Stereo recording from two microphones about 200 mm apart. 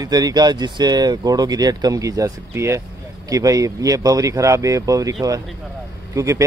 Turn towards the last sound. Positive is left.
turn(degrees=-15)  # may be behind; listen again after turning